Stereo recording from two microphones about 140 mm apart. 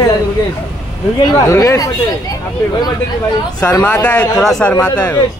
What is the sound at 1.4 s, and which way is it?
Speech, 25° left (ahead or behind).